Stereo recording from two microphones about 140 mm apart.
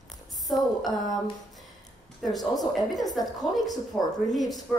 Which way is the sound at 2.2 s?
25° left (ahead or behind).